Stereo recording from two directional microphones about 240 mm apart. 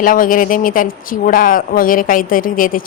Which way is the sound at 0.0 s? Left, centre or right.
Left.